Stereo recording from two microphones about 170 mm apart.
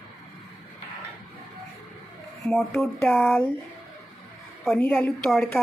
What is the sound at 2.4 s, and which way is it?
Speech, 5° left (ahead or behind).